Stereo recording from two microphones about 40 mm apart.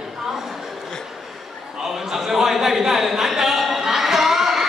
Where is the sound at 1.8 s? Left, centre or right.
Centre.